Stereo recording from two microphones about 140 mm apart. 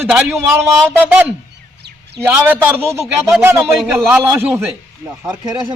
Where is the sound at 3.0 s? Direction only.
5° right (ahead or behind).